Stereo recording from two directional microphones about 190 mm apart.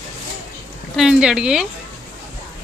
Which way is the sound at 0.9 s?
5° right (ahead or behind).